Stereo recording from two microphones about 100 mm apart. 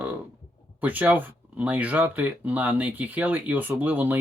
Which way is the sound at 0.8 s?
15° right (ahead or behind).